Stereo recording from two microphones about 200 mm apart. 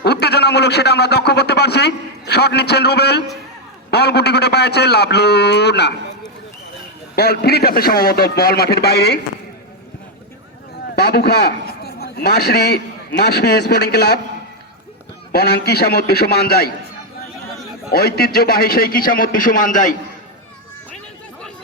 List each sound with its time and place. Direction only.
0.0 s a man's voice: 55° left (ahead or behind)
7.2 s a man's voice: 50° left (ahead or behind)
10.9 s a man's voice: 50° left (ahead or behind)
15.3 s a man's voice: 55° left (ahead or behind)
17.9 s a man's voice: 50° left (ahead or behind)